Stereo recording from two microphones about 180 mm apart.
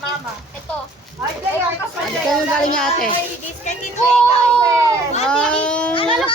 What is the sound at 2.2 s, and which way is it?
Speech, 5° left (ahead or behind).